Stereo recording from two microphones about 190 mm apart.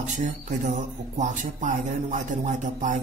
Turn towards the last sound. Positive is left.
turn(degrees=-40)  # may be behind; listen again after turning